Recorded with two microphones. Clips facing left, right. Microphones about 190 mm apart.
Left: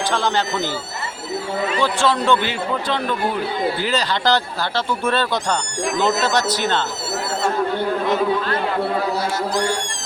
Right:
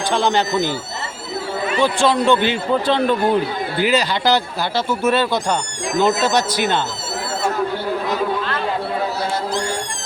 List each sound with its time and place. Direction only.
0.1 s speech: 15° right (ahead or behind)
1.8 s speech: 15° right (ahead or behind)
2.8 s speech: 30° right (ahead or behind)
3.8 s speech: 10° right (ahead or behind)